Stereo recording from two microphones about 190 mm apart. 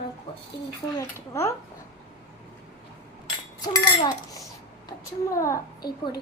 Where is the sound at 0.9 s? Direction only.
15° left (ahead or behind).